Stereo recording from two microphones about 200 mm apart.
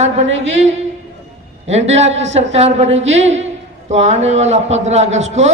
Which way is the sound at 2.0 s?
65° right (ahead or behind).